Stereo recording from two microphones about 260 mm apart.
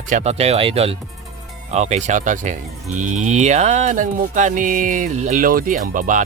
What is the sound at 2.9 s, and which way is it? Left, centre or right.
Music, right.